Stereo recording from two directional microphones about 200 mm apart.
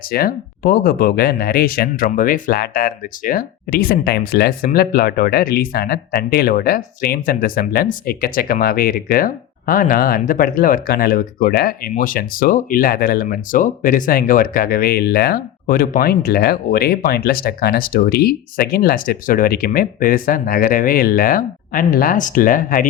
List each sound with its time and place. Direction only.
0.1 s speech: 50° left (ahead or behind)